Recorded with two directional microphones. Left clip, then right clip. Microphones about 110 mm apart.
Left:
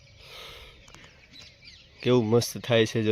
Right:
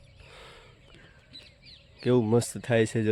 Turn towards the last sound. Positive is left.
turn(degrees=-20)  # may be behind; listen again after turning